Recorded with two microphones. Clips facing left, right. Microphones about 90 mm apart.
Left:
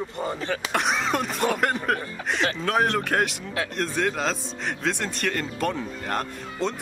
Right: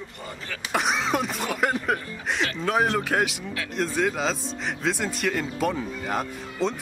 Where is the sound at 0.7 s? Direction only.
Centre (ahead or behind).